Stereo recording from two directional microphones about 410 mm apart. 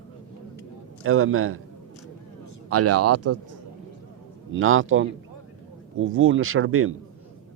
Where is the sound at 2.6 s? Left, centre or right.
Right.